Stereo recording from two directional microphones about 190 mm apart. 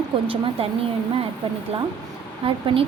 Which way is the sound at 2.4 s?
30° right (ahead or behind).